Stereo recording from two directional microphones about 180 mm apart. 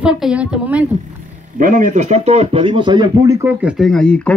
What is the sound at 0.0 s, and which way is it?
Speech, 5° right (ahead or behind).